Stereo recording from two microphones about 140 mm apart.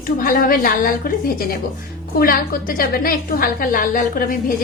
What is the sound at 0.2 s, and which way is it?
A woman's voice, 90° left.